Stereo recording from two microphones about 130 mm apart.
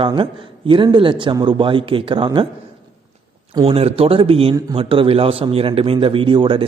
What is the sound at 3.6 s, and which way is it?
A man's voice, 50° right (ahead or behind).